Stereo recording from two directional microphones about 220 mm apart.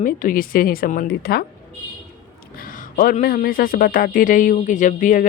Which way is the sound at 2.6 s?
40° left (ahead or behind).